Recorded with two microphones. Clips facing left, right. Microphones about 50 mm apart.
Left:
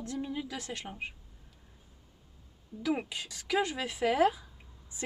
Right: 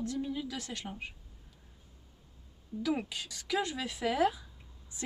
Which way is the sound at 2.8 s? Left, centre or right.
Centre.